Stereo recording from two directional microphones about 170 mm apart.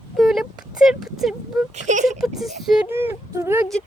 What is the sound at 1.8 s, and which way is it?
Speech, 45° right (ahead or behind).